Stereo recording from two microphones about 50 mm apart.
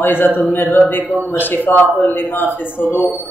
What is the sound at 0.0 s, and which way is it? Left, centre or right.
A man's voice, left.